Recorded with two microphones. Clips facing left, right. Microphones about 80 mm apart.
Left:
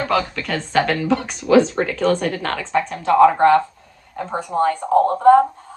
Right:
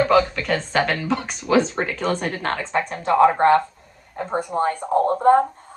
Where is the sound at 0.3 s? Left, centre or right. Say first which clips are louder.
Left 1 dB; right.